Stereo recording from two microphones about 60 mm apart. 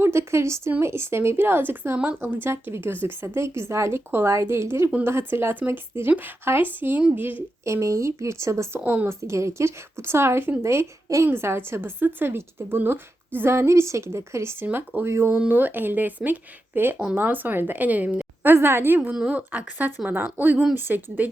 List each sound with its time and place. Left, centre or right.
0.0 s a woman's voice: right
2.5 s a woman's voice: right
7.6 s speech: right
8.8 s speech: right
9.0 s a woman's voice: right
18.5 s a woman's voice: right
19.3 s speech: right